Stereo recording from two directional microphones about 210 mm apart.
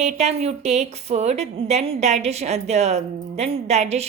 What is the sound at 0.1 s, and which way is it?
A woman's voice, 30° right (ahead or behind).